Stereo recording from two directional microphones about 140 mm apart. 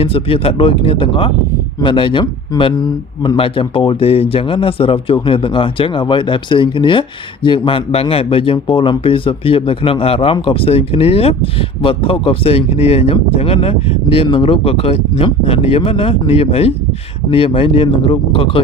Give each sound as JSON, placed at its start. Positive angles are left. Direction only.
{"t": 0.0, "sound": "speech", "side_deg": 40}